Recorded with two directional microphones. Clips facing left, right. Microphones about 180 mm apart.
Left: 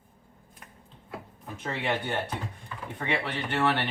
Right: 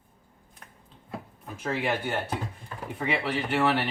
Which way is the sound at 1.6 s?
5° right (ahead or behind).